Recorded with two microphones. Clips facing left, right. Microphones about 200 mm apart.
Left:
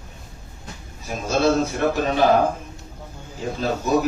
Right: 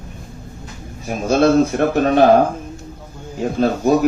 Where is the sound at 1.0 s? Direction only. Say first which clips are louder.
Right 6 dB; 55° right (ahead or behind).